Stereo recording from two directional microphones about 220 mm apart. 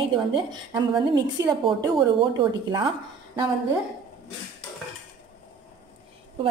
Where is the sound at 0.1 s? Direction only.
20° right (ahead or behind).